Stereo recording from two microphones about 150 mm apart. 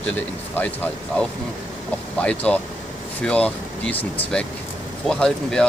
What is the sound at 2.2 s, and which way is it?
Speech, 10° left (ahead or behind).